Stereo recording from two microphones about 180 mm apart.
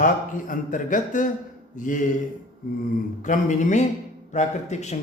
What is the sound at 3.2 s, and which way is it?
A man's voice, 45° left (ahead or behind).